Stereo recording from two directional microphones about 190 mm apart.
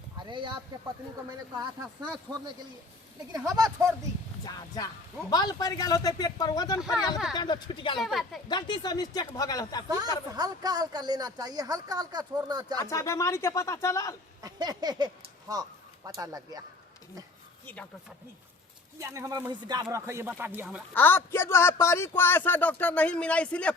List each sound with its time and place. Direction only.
0.2 s a sound: 25° right (ahead or behind)
2.3 s speech: 10° right (ahead or behind)
4.4 s speech: 20° left (ahead or behind)
7.9 s speech: centre (ahead or behind)
8.4 s speech: 25° left (ahead or behind)
9.9 s speech: 20° right (ahead or behind)
12.9 s a man's voice: 15° left (ahead or behind)
14.4 s speech: 20° right (ahead or behind)
17.7 s a man's voice: 10° left (ahead or behind)
18.9 s speech: 15° right (ahead or behind)
20.9 s a man's voice: 10° left (ahead or behind)